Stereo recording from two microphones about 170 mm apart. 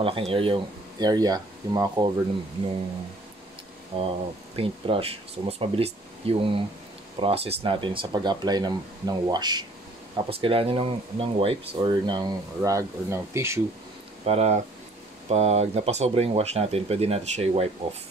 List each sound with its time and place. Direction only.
0.0 s speech: 30° right (ahead or behind)
3.9 s speech: 30° right (ahead or behind); by 13.6 s 15° right (ahead or behind)
14.2 s speech: 35° right (ahead or behind)